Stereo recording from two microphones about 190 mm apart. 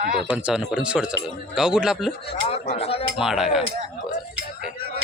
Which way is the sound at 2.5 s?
30° left (ahead or behind).